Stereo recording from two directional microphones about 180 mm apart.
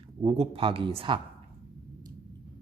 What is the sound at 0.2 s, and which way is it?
Speech, 30° right (ahead or behind).